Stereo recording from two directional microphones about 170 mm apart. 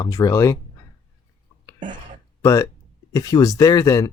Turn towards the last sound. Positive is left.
turn(degrees=20)  # may be behind; listen again after turning